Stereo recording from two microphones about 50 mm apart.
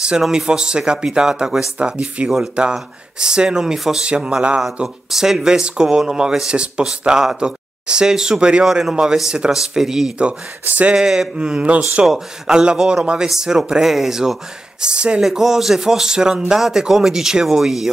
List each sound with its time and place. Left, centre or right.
0.2 s speech: centre
4.0 s speech: centre
4.8 s speech: centre
11.3 s speech: right
13.3 s speech: centre